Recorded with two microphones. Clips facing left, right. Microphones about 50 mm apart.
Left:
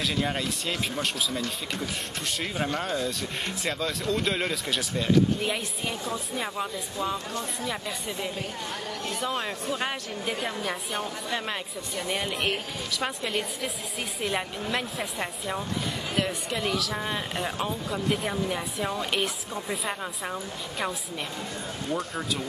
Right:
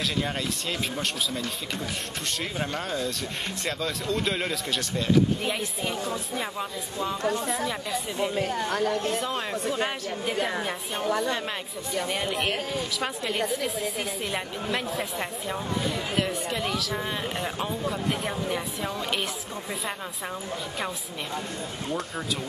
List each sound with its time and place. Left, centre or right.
0.0 s speech: centre
8.6 s a woman's voice: right
9.1 s speech: centre
12.1 s speech: centre